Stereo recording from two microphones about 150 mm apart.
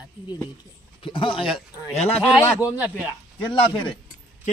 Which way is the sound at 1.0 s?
35° left (ahead or behind).